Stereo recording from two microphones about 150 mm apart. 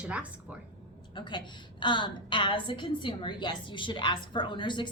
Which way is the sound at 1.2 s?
30° left (ahead or behind).